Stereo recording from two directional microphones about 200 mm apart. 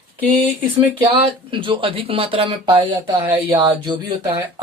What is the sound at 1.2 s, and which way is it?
Speech, 25° right (ahead or behind).